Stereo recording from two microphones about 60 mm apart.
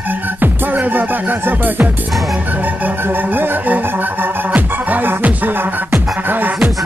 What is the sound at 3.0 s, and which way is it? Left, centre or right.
Music, right.